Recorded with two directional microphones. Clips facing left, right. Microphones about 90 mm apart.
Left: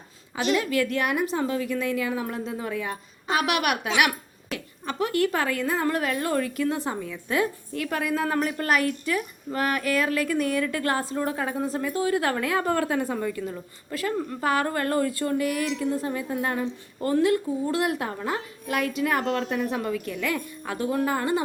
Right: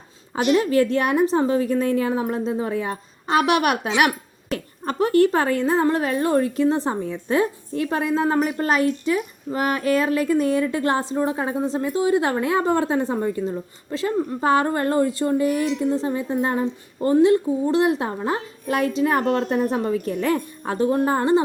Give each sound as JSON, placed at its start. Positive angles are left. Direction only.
{"t": 0.5, "sound": "a woman's voice", "side_deg": -35}